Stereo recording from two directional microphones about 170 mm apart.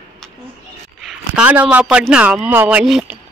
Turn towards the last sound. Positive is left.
turn(degrees=-5)  # may be behind; listen again after turning